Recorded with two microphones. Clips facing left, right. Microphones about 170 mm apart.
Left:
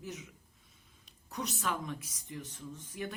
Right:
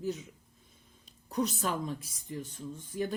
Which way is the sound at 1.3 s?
35° right (ahead or behind).